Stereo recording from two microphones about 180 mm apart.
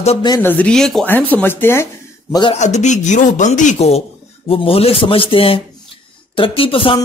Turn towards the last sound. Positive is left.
turn(degrees=30)  # may be behind; listen again after turning